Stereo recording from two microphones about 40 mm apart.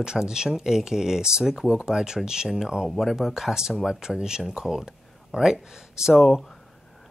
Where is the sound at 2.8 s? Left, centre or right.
Centre.